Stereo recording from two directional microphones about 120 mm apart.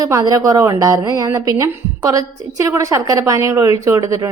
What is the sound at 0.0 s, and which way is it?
A woman's voice, 30° right (ahead or behind).